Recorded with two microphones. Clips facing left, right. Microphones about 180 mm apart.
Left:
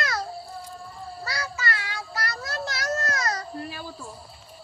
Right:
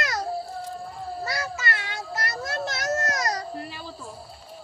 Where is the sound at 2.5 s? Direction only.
25° right (ahead or behind).